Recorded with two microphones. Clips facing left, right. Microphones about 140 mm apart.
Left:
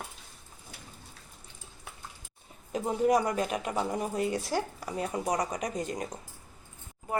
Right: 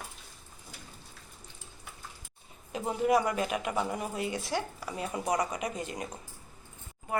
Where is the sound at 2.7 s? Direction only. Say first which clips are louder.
Left 1 dB; 40° left (ahead or behind).